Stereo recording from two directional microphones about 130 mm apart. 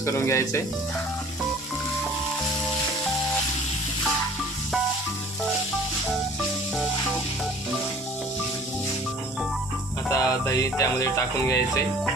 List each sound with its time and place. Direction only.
0.0 s speech: 20° left (ahead or behind)
10.1 s speech: 25° left (ahead or behind)